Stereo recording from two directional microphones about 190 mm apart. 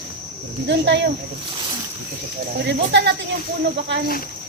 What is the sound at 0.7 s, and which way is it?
Speech, 65° right (ahead or behind).